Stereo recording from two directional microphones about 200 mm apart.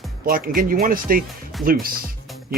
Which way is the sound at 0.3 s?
45° right (ahead or behind).